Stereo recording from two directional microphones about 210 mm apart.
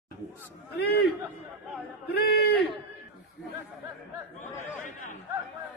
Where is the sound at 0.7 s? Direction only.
50° left (ahead or behind).